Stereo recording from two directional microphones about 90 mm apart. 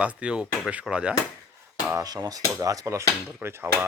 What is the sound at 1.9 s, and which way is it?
Speech, 40° right (ahead or behind).